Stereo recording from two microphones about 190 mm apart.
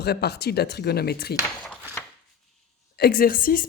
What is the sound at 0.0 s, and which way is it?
A woman's voice, 60° left (ahead or behind).